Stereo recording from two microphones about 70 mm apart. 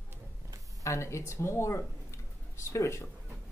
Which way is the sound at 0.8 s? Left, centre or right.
Left.